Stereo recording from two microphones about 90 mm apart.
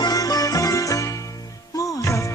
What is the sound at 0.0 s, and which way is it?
Music, 45° left (ahead or behind).